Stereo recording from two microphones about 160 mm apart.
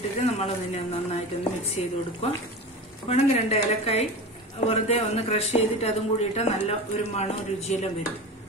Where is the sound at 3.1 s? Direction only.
40° left (ahead or behind).